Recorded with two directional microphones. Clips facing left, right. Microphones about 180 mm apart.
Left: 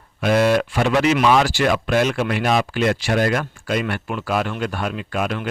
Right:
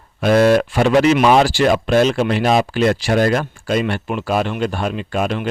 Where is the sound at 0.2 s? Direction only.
40° right (ahead or behind).